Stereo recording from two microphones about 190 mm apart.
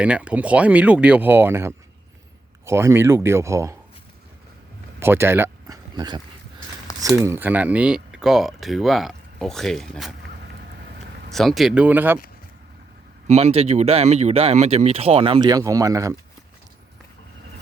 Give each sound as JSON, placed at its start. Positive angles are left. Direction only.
{"t": 0.0, "sound": "speech", "side_deg": -5}
{"t": 4.9, "sound": "speech", "side_deg": -10}
{"t": 11.3, "sound": "speech", "side_deg": 0}
{"t": 13.2, "sound": "speech", "side_deg": -35}